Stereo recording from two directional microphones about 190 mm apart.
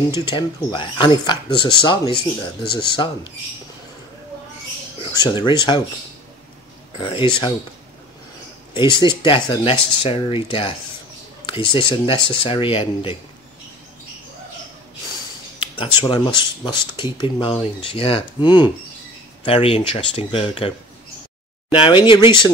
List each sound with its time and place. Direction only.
0.2 s speech: 25° left (ahead or behind)
5.1 s speech: 25° left (ahead or behind)
7.0 s speech: 25° left (ahead or behind)
8.7 s speech: 25° left (ahead or behind)
15.6 s speech: 25° left (ahead or behind)
21.7 s speech: 25° left (ahead or behind)